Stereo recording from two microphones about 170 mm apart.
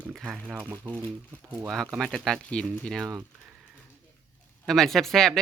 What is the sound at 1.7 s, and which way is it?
Speech, centre (ahead or behind).